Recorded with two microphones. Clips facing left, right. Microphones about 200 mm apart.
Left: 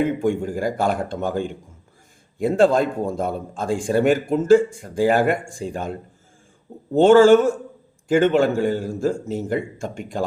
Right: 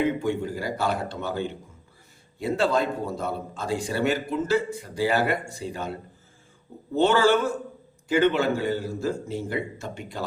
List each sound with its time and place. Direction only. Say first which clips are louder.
0.0 s a man's voice: left 4 dB; 50° left (ahead or behind)